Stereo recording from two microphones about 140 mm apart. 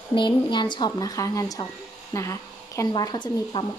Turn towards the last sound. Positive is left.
turn(degrees=30)  # may be behind; listen again after turning